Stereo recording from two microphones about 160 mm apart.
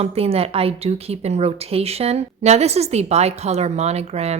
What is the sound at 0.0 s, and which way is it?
A woman's voice, 40° right (ahead or behind).